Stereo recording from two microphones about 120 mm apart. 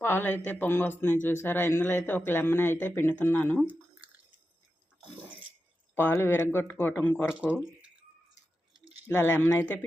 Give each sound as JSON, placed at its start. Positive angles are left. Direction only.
{"t": 0.0, "sound": "a man's voice", "side_deg": 15}
{"t": 5.9, "sound": "a man's voice", "side_deg": 15}
{"t": 7.3, "sound": "speech", "side_deg": -5}
{"t": 9.0, "sound": "a man's voice", "side_deg": 15}